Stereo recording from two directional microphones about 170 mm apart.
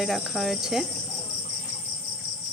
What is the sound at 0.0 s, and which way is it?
Speech, centre (ahead or behind).